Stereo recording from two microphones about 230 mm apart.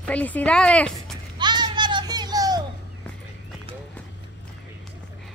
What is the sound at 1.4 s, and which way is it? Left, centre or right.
Children playing, centre.